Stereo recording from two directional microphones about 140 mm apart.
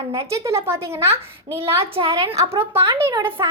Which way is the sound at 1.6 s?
40° right (ahead or behind).